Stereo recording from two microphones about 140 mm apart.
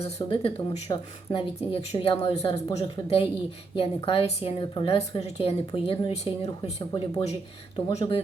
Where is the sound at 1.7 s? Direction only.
40° left (ahead or behind).